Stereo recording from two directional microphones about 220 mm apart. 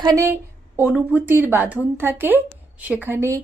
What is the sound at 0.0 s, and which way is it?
A woman's voice, 15° right (ahead or behind).